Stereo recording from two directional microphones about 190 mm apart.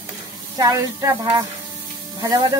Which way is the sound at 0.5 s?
20° right (ahead or behind).